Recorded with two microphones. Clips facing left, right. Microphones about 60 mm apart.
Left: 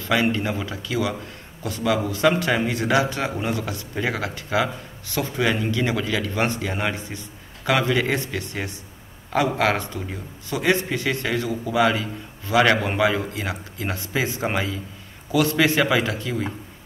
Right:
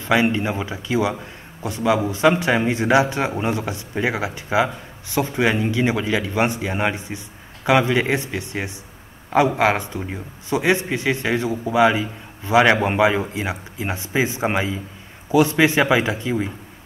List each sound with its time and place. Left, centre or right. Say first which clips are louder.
0.0 s a man's voice: right 3 dB; right